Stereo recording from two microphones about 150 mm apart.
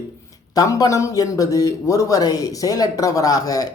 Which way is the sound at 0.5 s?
25° left (ahead or behind).